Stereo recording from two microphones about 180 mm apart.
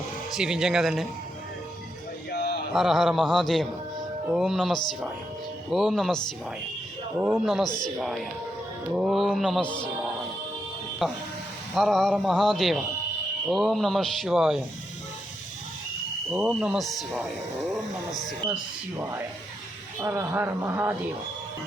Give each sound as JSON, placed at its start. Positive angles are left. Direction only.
{"t": 0.3, "sound": "speech", "side_deg": -5}
{"t": 2.3, "sound": "a sound", "side_deg": 65}
{"t": 2.7, "sound": "speech", "side_deg": 0}
{"t": 7.2, "sound": "speech", "side_deg": -5}
{"t": 9.6, "sound": "a man's voice", "side_deg": 25}
{"t": 11.7, "sound": "speech", "side_deg": 0}
{"t": 16.5, "sound": "speech", "side_deg": 0}
{"t": 18.3, "sound": "speech", "side_deg": -5}
{"t": 20.0, "sound": "speech", "side_deg": -15}